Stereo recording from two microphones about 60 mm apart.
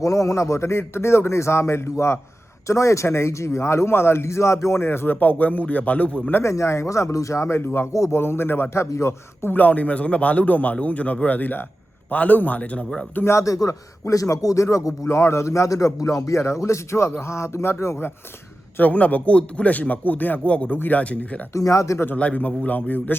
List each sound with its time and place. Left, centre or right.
0.0 s speech: left
2.6 s speech: left
6.4 s speech: left
7.9 s a man's voice: left
8.2 s speech: left
9.6 s a man's voice: left
13.2 s a man's voice: left
18.8 s a man's voice: left
21.5 s a man's voice: left
22.0 s a man's voice: left